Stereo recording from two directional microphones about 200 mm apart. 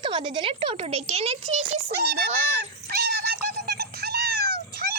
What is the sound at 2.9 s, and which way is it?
Cat, 50° right (ahead or behind).